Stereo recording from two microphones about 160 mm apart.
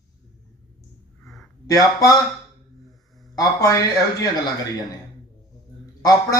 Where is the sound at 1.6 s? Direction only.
20° left (ahead or behind).